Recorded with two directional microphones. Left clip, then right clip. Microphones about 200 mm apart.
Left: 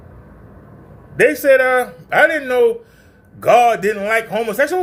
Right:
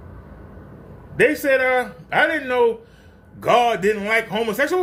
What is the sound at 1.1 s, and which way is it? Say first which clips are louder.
A man's voice: left 5 dB; 20° left (ahead or behind).